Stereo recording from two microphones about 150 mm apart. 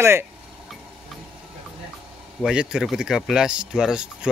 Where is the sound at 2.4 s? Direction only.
5° right (ahead or behind).